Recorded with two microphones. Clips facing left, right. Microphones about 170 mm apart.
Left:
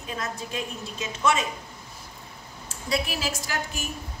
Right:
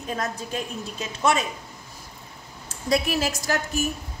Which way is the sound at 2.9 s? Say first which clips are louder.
Right 5 dB; 45° right (ahead or behind).